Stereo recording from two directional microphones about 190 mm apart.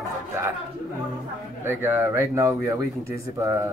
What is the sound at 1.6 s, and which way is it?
Speech, 10° right (ahead or behind).